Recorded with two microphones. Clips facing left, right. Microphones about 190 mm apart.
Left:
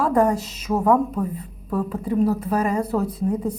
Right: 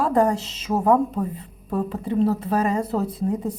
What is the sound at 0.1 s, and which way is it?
A woman's voice, 35° right (ahead or behind).